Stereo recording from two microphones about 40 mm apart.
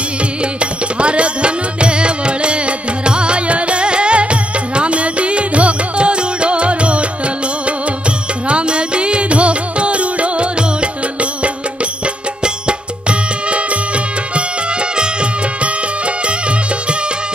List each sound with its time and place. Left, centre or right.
0.6 s music: right
8.5 s music: right